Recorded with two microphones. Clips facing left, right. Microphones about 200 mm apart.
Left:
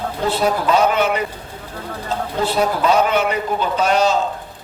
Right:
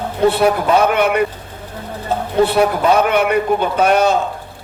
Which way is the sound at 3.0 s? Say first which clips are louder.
Right 4 dB; 60° right (ahead or behind).